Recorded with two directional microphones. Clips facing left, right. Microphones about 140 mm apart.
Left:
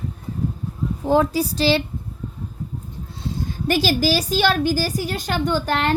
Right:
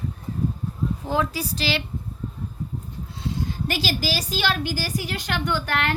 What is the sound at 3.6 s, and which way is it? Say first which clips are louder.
A woman's voice: left 10 dB; 45° left (ahead or behind).